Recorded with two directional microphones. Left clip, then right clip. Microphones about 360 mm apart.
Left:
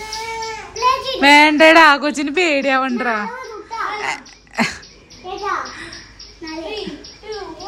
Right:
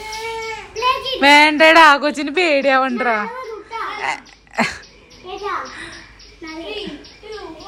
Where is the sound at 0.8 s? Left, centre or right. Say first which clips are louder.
Left 1 dB; centre.